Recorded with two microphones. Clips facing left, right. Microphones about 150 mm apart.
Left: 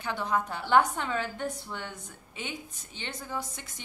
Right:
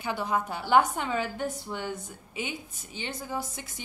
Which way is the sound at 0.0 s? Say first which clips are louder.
Right 1 dB; 10° right (ahead or behind).